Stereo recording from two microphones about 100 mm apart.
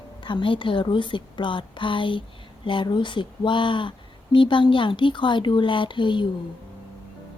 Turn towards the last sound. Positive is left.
turn(degrees=55)  # may be behind; listen again after turning